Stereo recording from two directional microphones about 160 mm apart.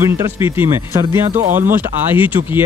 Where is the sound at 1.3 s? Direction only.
55° right (ahead or behind).